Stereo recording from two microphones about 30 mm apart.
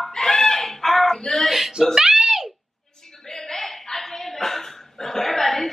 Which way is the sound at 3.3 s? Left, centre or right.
Centre.